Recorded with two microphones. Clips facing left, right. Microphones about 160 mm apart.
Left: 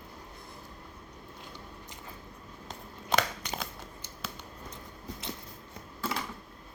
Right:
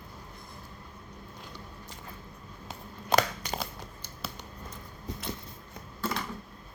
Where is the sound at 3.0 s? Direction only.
40° right (ahead or behind).